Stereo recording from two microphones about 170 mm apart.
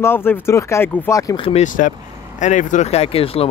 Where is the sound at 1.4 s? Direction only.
45° left (ahead or behind).